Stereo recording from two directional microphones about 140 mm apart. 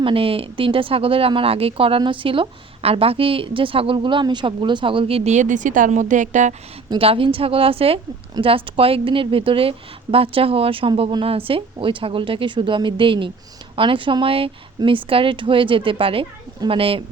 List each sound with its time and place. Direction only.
0.0 s speech: 40° right (ahead or behind); by 6.5 s 60° right (ahead or behind)
6.9 s speech: 40° right (ahead or behind)